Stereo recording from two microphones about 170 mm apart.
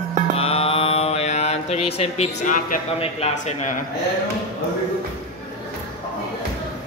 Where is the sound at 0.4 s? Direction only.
35° left (ahead or behind); by 2.8 s 50° left (ahead or behind).